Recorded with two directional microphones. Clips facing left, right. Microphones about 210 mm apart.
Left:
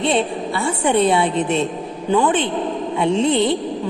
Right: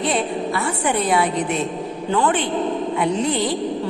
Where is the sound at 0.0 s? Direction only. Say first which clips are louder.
Left 2 dB; 25° left (ahead or behind).